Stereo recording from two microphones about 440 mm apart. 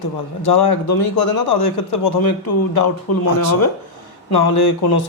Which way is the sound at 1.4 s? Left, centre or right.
Left.